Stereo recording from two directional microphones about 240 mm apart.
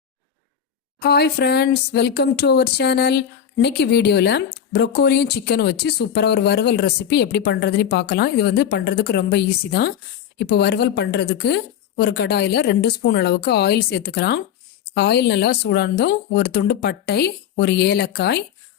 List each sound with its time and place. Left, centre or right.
0.9 s speech: left